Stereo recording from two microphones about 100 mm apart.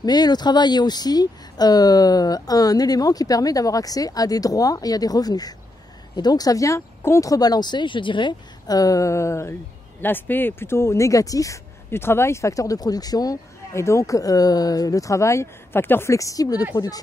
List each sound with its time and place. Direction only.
0.0 s speech: 45° left (ahead or behind)